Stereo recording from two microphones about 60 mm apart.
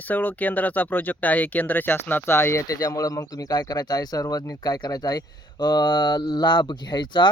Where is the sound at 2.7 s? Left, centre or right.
Left.